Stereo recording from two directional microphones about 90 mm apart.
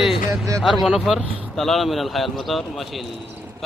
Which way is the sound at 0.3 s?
35° right (ahead or behind).